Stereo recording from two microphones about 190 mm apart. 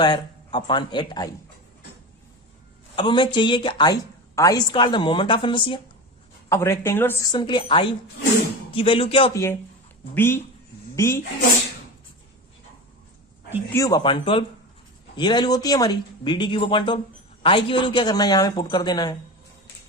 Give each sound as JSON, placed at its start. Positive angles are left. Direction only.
{"t": 0.0, "sound": "speech", "side_deg": 25}
{"t": 2.9, "sound": "speech", "side_deg": 25}
{"t": 6.5, "sound": "a woman's voice", "side_deg": 15}
{"t": 9.3, "sound": "a woman's voice", "side_deg": 15}
{"t": 13.7, "sound": "speech", "side_deg": 20}